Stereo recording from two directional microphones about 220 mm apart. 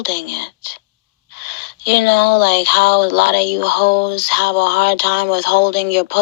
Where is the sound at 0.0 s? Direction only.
50° left (ahead or behind).